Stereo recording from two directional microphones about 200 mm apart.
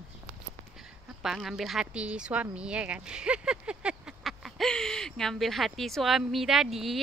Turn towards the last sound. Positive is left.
turn(degrees=0)  # may be behind; listen again after turning